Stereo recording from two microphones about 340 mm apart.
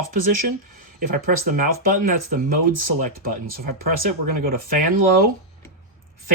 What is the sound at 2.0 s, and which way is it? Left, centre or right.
Speech, right.